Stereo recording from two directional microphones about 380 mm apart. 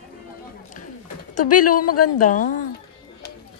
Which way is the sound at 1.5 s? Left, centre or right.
Left.